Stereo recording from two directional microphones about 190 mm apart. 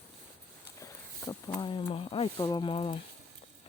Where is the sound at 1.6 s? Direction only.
25° left (ahead or behind).